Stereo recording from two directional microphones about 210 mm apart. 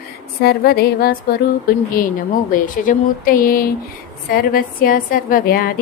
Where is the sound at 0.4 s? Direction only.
50° left (ahead or behind).